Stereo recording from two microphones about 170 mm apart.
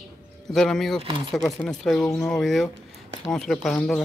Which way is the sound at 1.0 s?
30° right (ahead or behind).